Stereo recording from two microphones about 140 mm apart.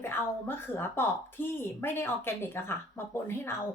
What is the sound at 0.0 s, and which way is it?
A woman's voice, 15° left (ahead or behind).